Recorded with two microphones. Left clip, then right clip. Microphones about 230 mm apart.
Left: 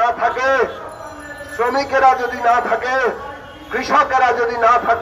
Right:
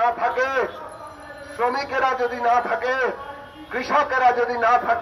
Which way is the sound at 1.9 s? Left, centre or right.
Right.